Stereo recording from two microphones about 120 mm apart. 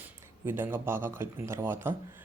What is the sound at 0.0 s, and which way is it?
Speech, 15° right (ahead or behind).